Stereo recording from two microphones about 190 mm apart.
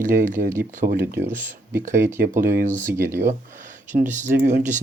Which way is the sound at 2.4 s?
45° right (ahead or behind).